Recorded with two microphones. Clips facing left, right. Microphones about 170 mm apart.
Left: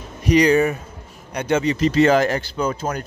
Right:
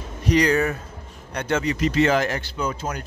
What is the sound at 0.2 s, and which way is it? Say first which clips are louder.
Speech: left 4 dB; 15° left (ahead or behind).